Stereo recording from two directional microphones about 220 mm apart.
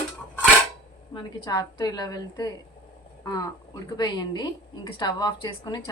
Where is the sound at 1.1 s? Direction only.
20° left (ahead or behind).